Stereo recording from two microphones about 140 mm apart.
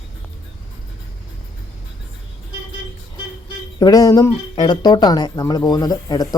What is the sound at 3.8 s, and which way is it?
Speech, 25° left (ahead or behind).